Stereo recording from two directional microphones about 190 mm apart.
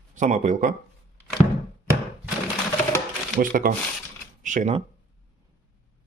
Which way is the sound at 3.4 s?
45° right (ahead or behind).